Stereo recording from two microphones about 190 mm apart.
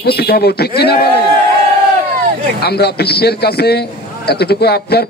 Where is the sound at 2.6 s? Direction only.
60° left (ahead or behind).